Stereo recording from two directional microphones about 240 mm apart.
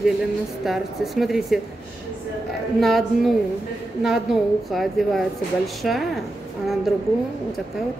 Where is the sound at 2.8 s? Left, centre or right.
Centre.